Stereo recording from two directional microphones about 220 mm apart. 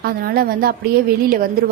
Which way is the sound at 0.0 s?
45° right (ahead or behind).